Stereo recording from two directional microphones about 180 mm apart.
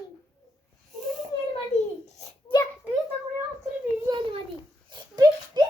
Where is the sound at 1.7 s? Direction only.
35° left (ahead or behind).